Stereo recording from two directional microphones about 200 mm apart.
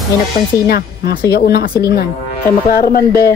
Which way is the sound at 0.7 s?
55° left (ahead or behind).